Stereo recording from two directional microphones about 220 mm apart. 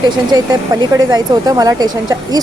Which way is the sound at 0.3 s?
20° right (ahead or behind).